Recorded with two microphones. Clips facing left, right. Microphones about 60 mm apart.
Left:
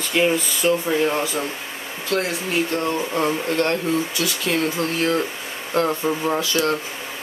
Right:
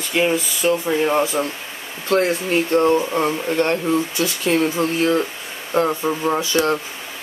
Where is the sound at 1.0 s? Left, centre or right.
Centre.